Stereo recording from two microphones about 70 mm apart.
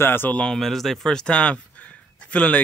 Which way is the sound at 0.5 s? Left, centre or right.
Centre.